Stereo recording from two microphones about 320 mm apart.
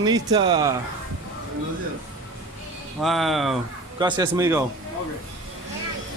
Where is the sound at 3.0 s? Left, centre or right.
Centre.